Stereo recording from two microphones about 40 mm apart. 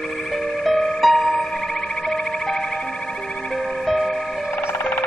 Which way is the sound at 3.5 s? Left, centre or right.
Centre.